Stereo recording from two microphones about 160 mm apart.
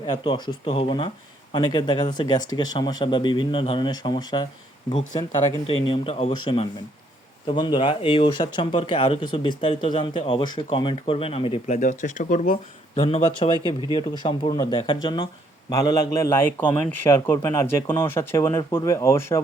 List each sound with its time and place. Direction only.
0.3 s speech: 30° left (ahead or behind)
5.6 s speech: 35° left (ahead or behind)
11.8 s speech: 50° left (ahead or behind)
13.0 s a man's voice: 35° left (ahead or behind); by 19.4 s 15° left (ahead or behind)